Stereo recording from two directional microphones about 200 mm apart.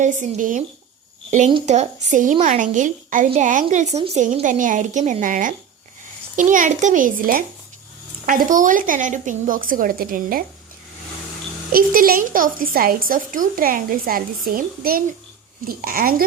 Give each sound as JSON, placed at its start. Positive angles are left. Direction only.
{"t": 0.0, "sound": "a woman's voice", "side_deg": -40}
{"t": 1.5, "sound": "a woman's voice", "side_deg": -30}
{"t": 11.7, "sound": "a woman's voice", "side_deg": -45}